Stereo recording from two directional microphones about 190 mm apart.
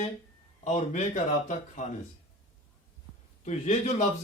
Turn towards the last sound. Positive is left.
turn(degrees=40)  # may be behind; listen again after turning